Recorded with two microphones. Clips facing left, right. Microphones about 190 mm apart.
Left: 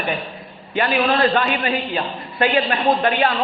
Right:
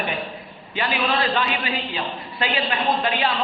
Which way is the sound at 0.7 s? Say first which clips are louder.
Left 5 dB; 50° left (ahead or behind).